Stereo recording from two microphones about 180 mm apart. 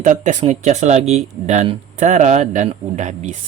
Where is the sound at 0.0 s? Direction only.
45° right (ahead or behind).